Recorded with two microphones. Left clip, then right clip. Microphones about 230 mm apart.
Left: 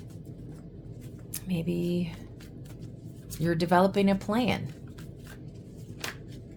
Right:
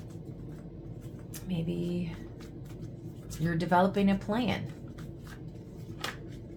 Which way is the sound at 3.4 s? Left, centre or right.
Left.